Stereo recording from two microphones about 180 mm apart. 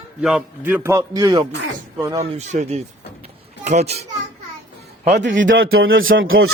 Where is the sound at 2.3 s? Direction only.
40° right (ahead or behind).